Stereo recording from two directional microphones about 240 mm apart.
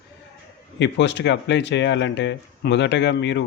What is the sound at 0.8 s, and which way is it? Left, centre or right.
Speech, left.